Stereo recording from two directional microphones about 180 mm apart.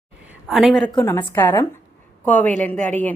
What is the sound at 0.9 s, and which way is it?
A woman's voice, 10° left (ahead or behind).